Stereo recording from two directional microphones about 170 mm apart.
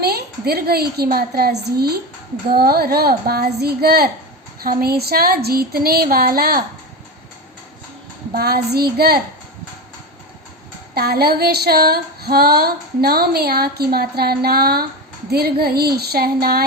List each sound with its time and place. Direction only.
0.0 s a woman's voice: 70° right (ahead or behind)
2.5 s female singing: 65° right (ahead or behind)
8.3 s a child's voice: 65° right (ahead or behind)
10.9 s female singing: 65° right (ahead or behind)